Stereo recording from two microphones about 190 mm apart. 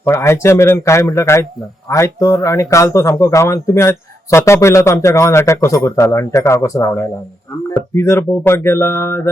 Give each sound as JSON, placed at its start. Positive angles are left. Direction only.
{"t": 0.0, "sound": "speech", "side_deg": 15}